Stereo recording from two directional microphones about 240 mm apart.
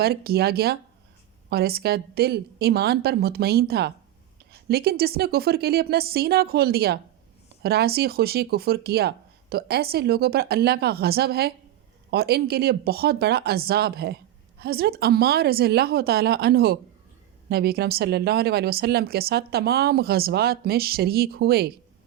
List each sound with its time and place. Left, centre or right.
0.0 s speech: right